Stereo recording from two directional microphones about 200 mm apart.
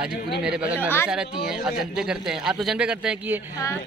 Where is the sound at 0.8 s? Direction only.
10° left (ahead or behind).